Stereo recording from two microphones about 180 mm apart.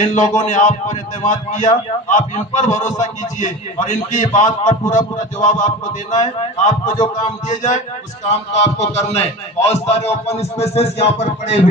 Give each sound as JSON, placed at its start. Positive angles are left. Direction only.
{"t": 0.0, "sound": "a man's voice", "side_deg": 40}